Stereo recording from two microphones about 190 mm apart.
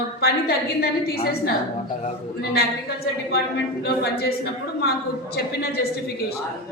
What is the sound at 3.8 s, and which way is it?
Speech, 55° left (ahead or behind).